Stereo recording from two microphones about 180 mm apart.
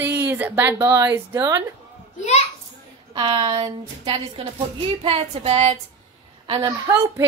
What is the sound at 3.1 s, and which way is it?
A woman's voice, 25° right (ahead or behind).